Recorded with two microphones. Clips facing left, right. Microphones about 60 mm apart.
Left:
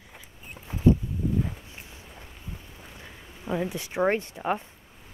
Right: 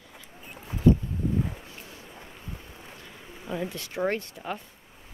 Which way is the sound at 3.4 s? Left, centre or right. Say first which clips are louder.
Left 3 dB; centre.